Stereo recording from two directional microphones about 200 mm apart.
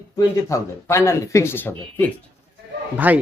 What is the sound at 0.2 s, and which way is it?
Speech, 15° left (ahead or behind).